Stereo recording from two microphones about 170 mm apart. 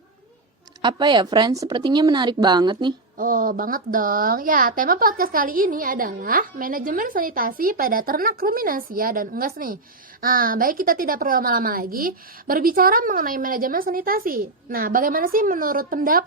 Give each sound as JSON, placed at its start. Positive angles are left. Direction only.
{"t": 0.8, "sound": "speech", "side_deg": -25}
{"t": 3.2, "sound": "speech", "side_deg": -55}